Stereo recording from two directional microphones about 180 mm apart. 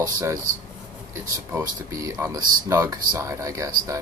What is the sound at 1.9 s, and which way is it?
Speech, 20° right (ahead or behind).